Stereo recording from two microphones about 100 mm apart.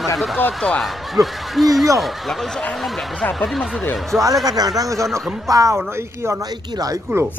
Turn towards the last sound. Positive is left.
turn(degrees=-25)  # may be behind; listen again after turning